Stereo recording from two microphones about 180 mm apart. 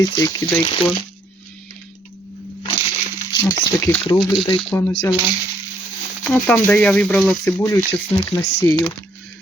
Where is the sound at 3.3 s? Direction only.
15° left (ahead or behind).